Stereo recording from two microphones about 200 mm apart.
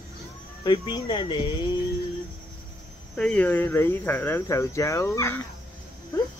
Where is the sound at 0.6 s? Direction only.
20° left (ahead or behind).